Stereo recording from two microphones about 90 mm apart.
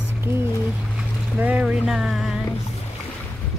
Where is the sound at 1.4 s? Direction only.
15° right (ahead or behind).